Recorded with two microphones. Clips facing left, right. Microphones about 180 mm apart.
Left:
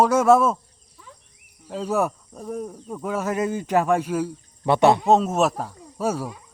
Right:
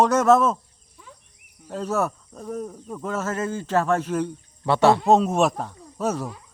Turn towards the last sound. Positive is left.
turn(degrees=10)  # may be behind; listen again after turning